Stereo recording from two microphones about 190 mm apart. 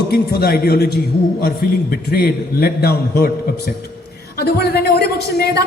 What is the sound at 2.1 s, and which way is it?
A man's voice, 55° left (ahead or behind).